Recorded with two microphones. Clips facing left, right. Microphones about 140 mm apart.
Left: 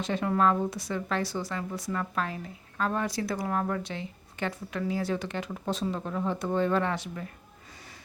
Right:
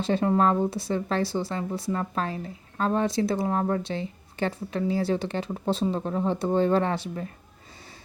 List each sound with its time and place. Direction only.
0.0 s speech: 30° right (ahead or behind)